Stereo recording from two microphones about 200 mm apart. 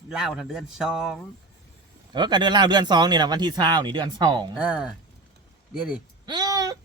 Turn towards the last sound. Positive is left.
turn(degrees=-20)  # may be behind; listen again after turning